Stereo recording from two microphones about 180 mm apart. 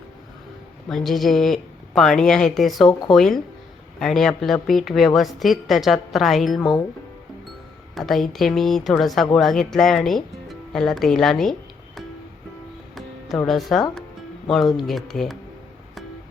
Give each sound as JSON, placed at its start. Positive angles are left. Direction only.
{"t": 0.9, "sound": "speech", "side_deg": 0}
{"t": 7.9, "sound": "speech", "side_deg": 0}
{"t": 13.5, "sound": "speech", "side_deg": 0}